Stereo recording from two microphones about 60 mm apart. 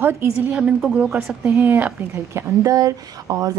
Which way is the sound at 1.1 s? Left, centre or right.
Right.